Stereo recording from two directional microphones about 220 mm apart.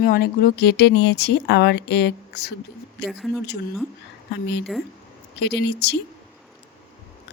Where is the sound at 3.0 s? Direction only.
Centre (ahead or behind).